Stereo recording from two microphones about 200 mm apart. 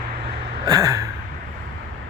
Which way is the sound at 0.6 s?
15° right (ahead or behind).